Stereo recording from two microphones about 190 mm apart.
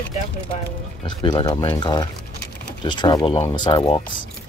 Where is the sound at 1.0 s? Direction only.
20° left (ahead or behind).